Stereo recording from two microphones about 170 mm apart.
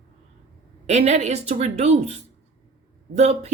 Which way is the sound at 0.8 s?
40° right (ahead or behind).